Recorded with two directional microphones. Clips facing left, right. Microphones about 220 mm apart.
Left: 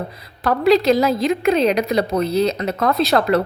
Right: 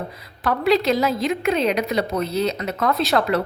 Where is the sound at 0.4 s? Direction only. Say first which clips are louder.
Left 4 dB; 40° left (ahead or behind).